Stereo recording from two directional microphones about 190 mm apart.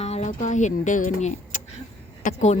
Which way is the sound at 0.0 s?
35° left (ahead or behind).